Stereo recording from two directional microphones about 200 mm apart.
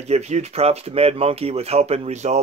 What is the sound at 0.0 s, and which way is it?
Speech, 35° right (ahead or behind).